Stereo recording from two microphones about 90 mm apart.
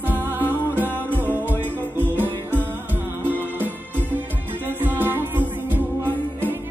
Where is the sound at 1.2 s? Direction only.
20° right (ahead or behind).